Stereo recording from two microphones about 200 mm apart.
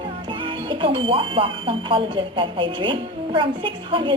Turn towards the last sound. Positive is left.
turn(degrees=-25)  # may be behind; listen again after turning